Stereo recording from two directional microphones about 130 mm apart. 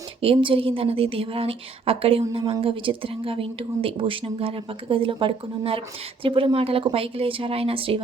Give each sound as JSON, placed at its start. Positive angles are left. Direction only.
{"t": 0.2, "sound": "speech", "side_deg": -45}